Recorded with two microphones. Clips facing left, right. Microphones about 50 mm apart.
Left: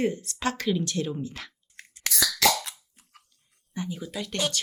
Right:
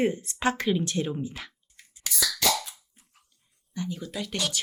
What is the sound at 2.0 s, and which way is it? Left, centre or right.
Beatboxing, left.